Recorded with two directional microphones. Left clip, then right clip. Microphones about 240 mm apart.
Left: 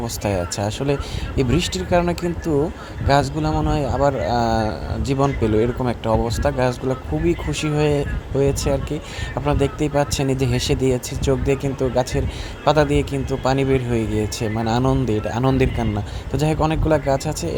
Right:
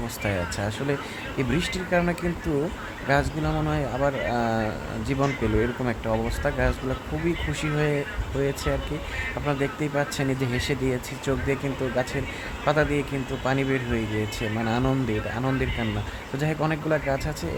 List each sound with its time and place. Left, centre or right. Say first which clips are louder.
0.3 s speech: left 5 dB; left